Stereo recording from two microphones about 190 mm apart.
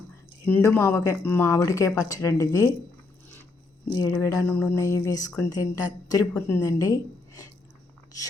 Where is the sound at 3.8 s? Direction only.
25° left (ahead or behind).